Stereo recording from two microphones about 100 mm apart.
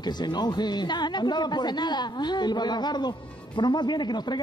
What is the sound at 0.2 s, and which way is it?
A woman's voice, 45° left (ahead or behind).